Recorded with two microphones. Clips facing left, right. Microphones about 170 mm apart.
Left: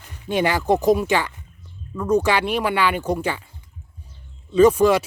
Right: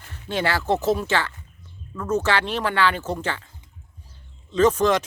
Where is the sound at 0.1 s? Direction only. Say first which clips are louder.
Left 4 dB; 15° left (ahead or behind).